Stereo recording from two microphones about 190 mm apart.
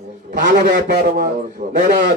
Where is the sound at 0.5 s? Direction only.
55° right (ahead or behind).